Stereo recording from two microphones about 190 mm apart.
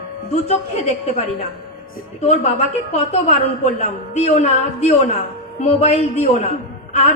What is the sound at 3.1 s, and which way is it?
A woman's voice, 35° left (ahead or behind).